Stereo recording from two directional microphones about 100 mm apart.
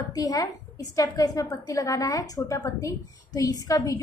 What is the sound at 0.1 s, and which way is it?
A woman's voice, 40° left (ahead or behind).